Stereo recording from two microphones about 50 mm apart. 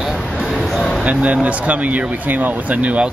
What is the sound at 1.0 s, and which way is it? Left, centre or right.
Speech, right.